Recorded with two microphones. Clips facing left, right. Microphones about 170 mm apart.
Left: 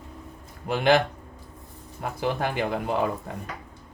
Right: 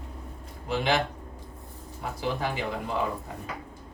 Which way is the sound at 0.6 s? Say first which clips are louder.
Left 6 dB; 55° left (ahead or behind).